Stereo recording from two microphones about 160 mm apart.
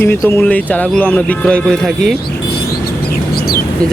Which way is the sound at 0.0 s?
15° left (ahead or behind).